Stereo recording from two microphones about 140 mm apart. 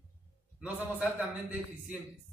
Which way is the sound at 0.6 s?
10° right (ahead or behind).